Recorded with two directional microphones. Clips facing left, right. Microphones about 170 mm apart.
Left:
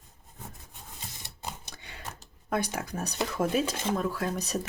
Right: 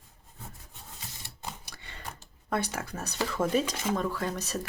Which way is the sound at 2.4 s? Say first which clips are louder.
Left 1 dB; 10° left (ahead or behind).